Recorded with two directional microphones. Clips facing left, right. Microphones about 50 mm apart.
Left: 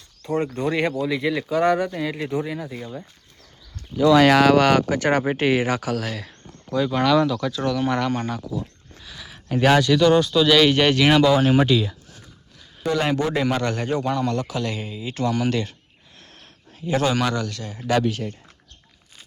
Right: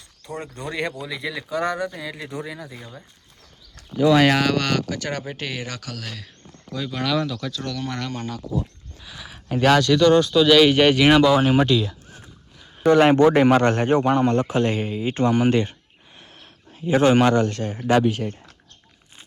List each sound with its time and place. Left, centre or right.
0.2 s speech: centre
3.9 s speech: centre
4.3 s speech: centre
4.5 s speech: centre
4.9 s speech: left; by 7.5 s centre
7.5 s speech: centre
8.1 s speech: left
9.0 s speech: centre
11.5 s speech: centre
12.8 s a man's voice: right
16.8 s a man's voice: centre
17.1 s a man's voice: right
18.0 s speech: centre